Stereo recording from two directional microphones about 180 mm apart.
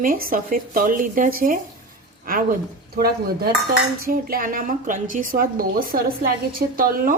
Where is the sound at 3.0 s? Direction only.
55° right (ahead or behind).